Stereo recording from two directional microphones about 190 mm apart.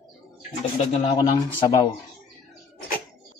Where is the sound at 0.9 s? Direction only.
25° left (ahead or behind).